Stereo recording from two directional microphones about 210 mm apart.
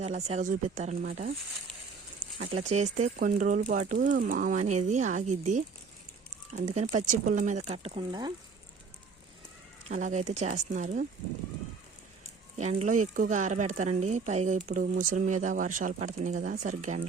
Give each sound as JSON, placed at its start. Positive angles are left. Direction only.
{"t": 0.0, "sound": "speech", "side_deg": -30}
{"t": 2.4, "sound": "speech", "side_deg": -30}
{"t": 6.7, "sound": "speech", "side_deg": -35}
{"t": 9.9, "sound": "speech", "side_deg": -35}
{"t": 12.5, "sound": "speech", "side_deg": -35}